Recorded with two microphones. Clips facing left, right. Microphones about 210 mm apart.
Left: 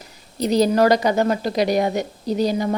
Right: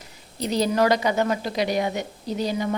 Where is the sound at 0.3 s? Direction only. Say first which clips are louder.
Left 5 dB; 40° left (ahead or behind).